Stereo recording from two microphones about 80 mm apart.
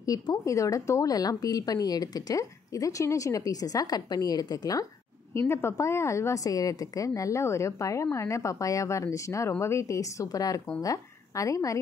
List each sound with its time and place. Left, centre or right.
0.0 s speech: left
5.3 s a woman's voice: left